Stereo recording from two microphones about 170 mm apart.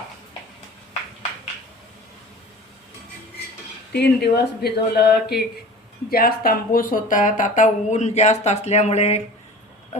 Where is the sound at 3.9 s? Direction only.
75° left (ahead or behind).